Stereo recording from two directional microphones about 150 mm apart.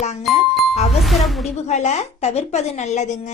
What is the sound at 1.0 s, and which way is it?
Speech, centre (ahead or behind).